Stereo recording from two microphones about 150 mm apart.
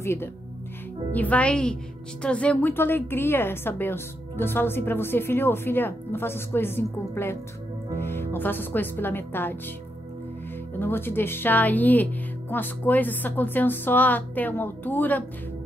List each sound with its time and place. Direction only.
0.0 s a woman's voice: 15° left (ahead or behind)
10.8 s a woman's voice: 15° left (ahead or behind)